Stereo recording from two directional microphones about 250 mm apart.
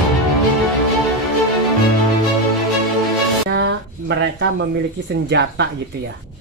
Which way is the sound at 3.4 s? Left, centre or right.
Right.